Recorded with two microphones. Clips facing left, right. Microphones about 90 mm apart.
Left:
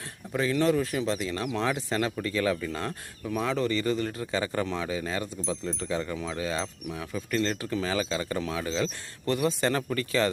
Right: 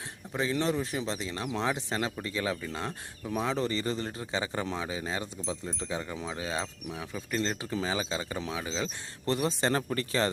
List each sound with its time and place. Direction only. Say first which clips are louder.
0.3 s speech: left 4 dB; 25° right (ahead or behind)
9.2 s speech: left 2 dB; 30° right (ahead or behind)